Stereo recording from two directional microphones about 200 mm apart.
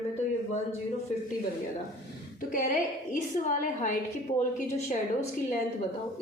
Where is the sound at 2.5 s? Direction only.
45° left (ahead or behind).